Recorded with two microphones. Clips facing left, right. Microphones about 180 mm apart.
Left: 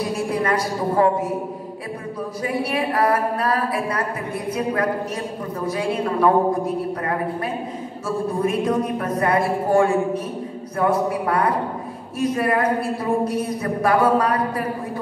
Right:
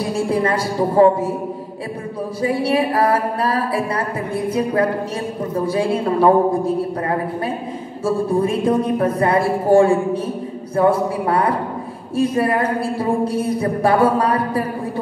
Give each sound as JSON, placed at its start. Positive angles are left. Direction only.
{"t": 0.1, "sound": "a woman's voice", "side_deg": -30}
{"t": 2.4, "sound": "a woman's voice", "side_deg": -30}
{"t": 5.7, "sound": "a woman's voice", "side_deg": -30}